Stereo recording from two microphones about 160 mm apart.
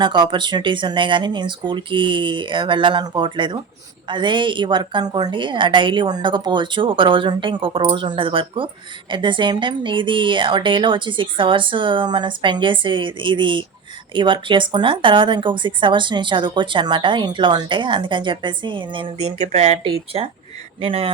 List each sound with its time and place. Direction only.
0.0 s a woman's voice: 30° right (ahead or behind)
19.4 s a woman's voice: 45° right (ahead or behind)